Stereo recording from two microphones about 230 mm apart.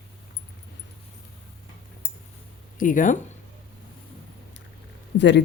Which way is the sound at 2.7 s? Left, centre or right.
Left.